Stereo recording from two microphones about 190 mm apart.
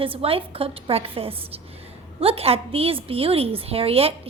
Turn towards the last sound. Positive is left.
turn(degrees=-30)  # may be behind; listen again after turning